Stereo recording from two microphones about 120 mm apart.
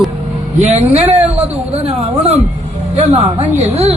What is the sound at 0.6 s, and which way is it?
Speech, 70° right (ahead or behind).